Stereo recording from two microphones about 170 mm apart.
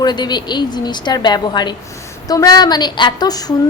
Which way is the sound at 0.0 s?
25° left (ahead or behind).